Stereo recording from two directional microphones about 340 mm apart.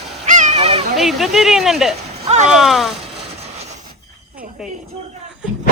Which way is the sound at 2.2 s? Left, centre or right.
Centre.